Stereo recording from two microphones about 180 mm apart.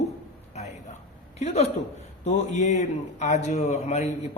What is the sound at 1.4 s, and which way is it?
A man's voice, 35° left (ahead or behind).